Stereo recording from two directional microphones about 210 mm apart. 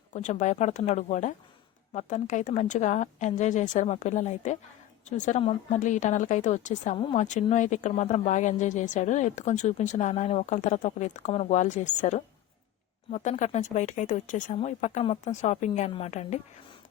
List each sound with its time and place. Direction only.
0.1 s speech: 35° left (ahead or behind)